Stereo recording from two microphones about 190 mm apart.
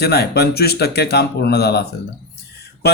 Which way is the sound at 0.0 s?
55° left (ahead or behind).